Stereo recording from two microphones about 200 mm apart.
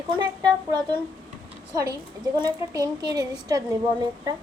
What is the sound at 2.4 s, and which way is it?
A woman's voice, 20° right (ahead or behind).